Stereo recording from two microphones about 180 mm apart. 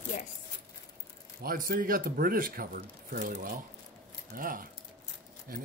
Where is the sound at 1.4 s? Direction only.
55° right (ahead or behind).